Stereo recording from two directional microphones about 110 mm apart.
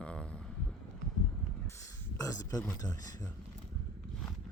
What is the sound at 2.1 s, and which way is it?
Speech, 30° left (ahead or behind).